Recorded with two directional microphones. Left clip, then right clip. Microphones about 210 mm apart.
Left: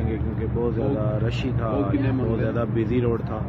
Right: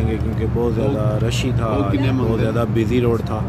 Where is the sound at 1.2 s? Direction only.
5° right (ahead or behind).